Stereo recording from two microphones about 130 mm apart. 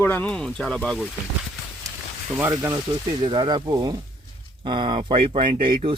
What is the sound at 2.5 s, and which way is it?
Speech, 25° right (ahead or behind).